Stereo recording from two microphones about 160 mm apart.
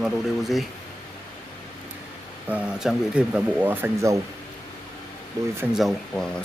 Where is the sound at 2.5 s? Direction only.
10° right (ahead or behind).